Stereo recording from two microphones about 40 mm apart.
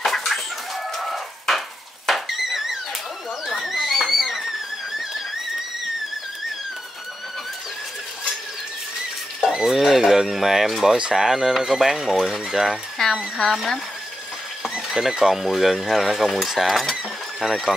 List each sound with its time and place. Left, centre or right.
0.0 s chicken: centre
2.0 s a sound: centre
9.5 s a sound: centre
9.8 s speech: centre
11.0 s speech: right
11.2 s speech: centre
13.0 s speech: centre
15.0 s speech: centre